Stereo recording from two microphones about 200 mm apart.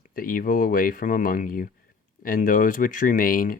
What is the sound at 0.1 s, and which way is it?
Speech, 45° left (ahead or behind).